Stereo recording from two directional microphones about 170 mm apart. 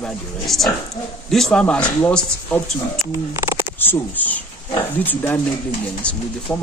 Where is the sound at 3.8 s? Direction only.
10° left (ahead or behind).